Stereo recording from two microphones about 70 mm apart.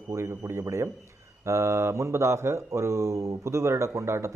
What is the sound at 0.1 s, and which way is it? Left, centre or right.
Speech, right.